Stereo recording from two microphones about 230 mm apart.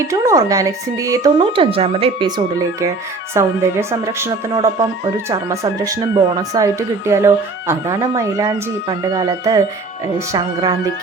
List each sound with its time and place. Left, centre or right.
0.1 s speech: centre